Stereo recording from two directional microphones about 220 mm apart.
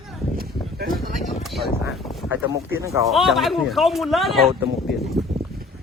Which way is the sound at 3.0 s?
Centre (ahead or behind).